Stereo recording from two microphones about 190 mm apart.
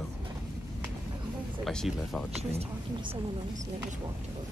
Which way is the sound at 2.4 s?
35° right (ahead or behind).